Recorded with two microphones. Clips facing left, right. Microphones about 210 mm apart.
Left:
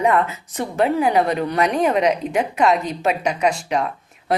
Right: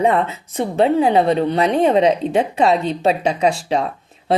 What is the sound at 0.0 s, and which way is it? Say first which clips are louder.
A woman's voice: right 2 dB; 30° right (ahead or behind).